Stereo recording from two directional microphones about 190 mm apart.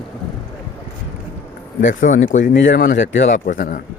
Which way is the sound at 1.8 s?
40° left (ahead or behind).